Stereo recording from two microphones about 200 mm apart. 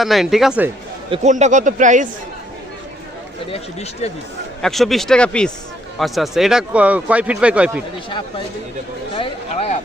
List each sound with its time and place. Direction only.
0.0 s speech: centre (ahead or behind)
1.1 s speech: 35° right (ahead or behind)
3.5 s speech: 35° left (ahead or behind)
4.6 s speech: centre (ahead or behind)
9.1 s speech: 25° left (ahead or behind)